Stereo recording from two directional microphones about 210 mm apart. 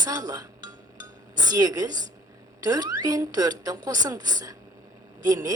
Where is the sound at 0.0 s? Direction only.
20° right (ahead or behind).